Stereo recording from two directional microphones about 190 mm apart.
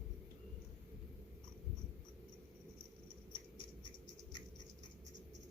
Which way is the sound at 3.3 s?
25° left (ahead or behind).